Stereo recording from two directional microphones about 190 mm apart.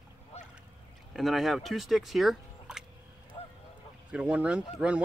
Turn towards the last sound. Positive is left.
turn(degrees=-5)  # may be behind; listen again after turning